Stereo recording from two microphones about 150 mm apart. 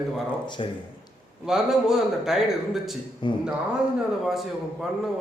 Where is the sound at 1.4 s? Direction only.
5° right (ahead or behind).